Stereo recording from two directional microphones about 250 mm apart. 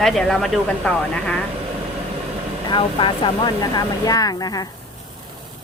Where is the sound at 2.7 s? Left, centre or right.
Centre.